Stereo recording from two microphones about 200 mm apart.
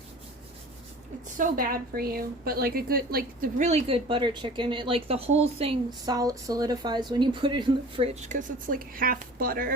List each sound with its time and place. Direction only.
1.4 s a woman's voice: 45° right (ahead or behind)
3.7 s speech: 30° right (ahead or behind)
6.1 s speech: 20° right (ahead or behind); by 9.7 s 45° right (ahead or behind)